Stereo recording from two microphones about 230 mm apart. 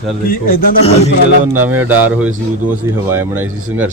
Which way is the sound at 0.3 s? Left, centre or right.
Left.